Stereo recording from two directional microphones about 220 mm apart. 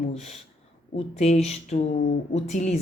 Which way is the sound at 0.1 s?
30° left (ahead or behind).